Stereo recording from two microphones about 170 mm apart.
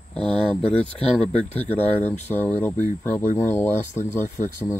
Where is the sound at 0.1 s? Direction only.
5° left (ahead or behind).